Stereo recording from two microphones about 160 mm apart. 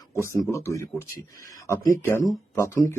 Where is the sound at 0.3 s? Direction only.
20° left (ahead or behind).